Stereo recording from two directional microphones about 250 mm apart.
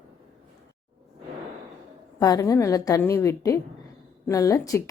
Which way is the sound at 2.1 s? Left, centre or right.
Centre.